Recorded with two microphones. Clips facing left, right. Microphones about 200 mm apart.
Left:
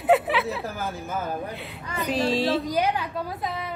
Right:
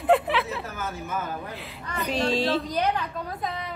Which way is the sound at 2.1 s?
Centre (ahead or behind).